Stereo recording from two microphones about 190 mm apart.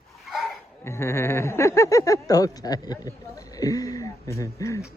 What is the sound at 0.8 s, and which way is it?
Speech, 15° left (ahead or behind).